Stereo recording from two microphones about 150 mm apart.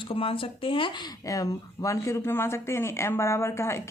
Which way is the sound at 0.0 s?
35° left (ahead or behind).